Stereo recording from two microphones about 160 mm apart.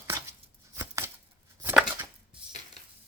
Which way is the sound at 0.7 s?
20° right (ahead or behind).